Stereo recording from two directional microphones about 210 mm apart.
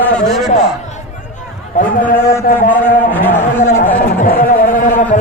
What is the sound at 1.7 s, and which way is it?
A man's voice, 40° left (ahead or behind).